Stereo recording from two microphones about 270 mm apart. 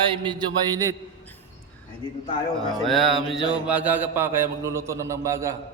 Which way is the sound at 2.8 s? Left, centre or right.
Centre.